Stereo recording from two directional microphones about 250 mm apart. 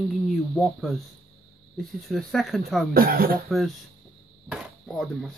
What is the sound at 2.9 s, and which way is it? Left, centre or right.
Speech, right.